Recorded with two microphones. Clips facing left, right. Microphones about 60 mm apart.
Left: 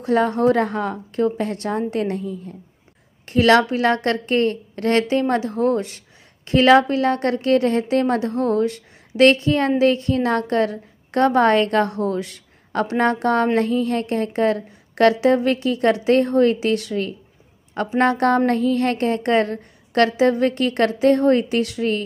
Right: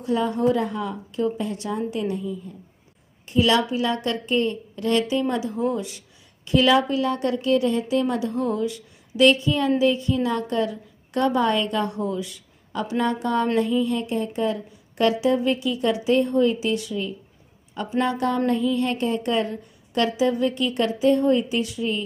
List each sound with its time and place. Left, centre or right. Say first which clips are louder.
0.0 s a woman's voice: left 4 dB; left